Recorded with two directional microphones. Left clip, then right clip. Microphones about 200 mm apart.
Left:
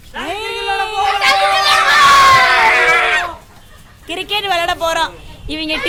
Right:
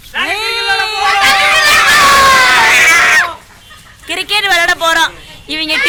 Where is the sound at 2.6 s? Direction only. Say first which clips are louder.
Right 4 dB; 15° right (ahead or behind).